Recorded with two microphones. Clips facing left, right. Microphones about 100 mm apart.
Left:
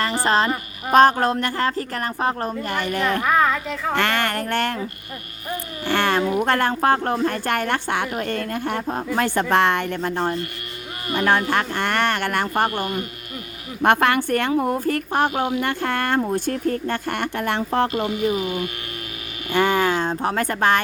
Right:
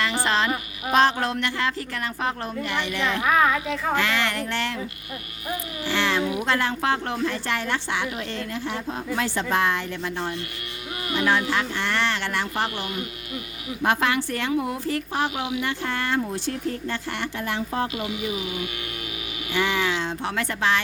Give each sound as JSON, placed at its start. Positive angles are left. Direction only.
{"t": 0.0, "sound": "a woman's voice", "side_deg": 40}
{"t": 3.2, "sound": "speech", "side_deg": -5}
{"t": 3.9, "sound": "speech", "side_deg": 55}
{"t": 5.8, "sound": "speech", "side_deg": 50}
{"t": 13.8, "sound": "a woman's voice", "side_deg": 60}